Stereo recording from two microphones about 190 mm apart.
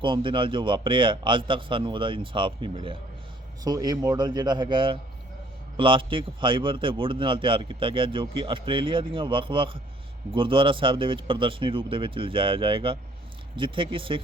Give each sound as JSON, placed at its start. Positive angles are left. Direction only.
{"t": 0.0, "sound": "a man's voice", "side_deg": -25}